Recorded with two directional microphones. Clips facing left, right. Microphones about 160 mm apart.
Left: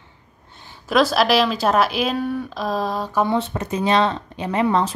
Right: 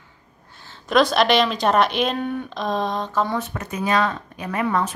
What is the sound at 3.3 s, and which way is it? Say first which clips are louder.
Speech: left 4 dB; 30° left (ahead or behind).